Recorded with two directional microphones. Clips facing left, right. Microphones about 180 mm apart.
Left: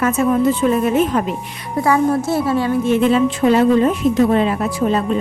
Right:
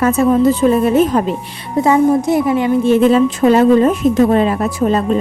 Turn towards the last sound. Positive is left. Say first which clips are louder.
# right 3 dB
turn(degrees=-40)  # may be behind; listen again after turning